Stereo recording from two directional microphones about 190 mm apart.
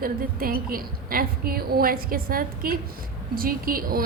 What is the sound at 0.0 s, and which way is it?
A woman's voice, 50° right (ahead or behind).